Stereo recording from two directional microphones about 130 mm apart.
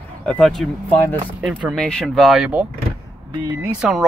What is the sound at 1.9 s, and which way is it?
Speech, 5° left (ahead or behind).